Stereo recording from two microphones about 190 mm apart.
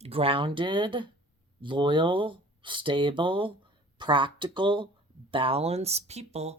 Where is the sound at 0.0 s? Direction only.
30° right (ahead or behind).